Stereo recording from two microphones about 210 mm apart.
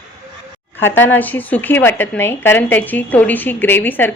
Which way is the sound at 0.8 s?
10° left (ahead or behind).